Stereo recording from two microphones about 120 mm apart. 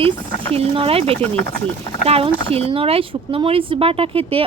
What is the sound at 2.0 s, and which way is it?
Speech, 50° right (ahead or behind).